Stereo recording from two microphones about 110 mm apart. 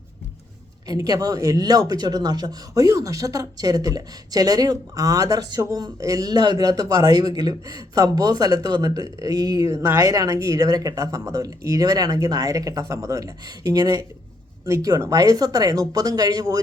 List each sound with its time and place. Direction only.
0.9 s speech: 35° right (ahead or behind)